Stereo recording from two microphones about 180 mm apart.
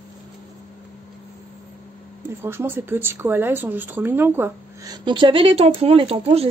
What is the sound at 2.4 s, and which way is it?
A woman's voice, 10° right (ahead or behind).